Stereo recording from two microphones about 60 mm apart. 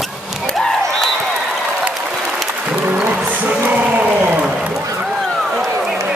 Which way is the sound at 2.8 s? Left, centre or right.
Right.